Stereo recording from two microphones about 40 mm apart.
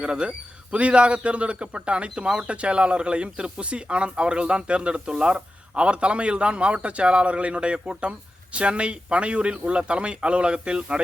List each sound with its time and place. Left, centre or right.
0.0 s speech: right